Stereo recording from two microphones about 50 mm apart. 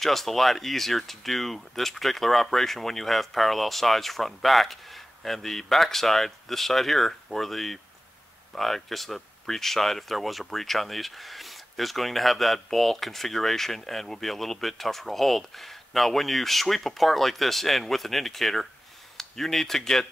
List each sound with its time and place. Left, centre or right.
0.0 s speech: centre